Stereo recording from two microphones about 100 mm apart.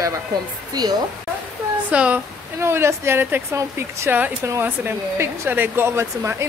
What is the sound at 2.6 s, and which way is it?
Speech, 25° right (ahead or behind).